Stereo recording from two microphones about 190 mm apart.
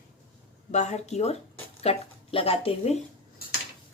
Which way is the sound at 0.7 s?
35° left (ahead or behind).